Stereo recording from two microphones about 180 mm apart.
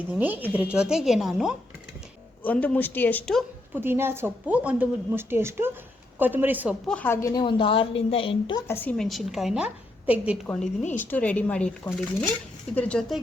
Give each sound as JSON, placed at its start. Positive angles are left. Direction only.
{"t": 0.2, "sound": "a woman's voice", "side_deg": -10}
{"t": 2.4, "sound": "speech", "side_deg": 10}
{"t": 3.8, "sound": "a woman's voice", "side_deg": -15}
{"t": 6.8, "sound": "a woman's voice", "side_deg": 10}
{"t": 8.6, "sound": "a woman's voice", "side_deg": 10}
{"t": 10.4, "sound": "a woman's voice", "side_deg": 5}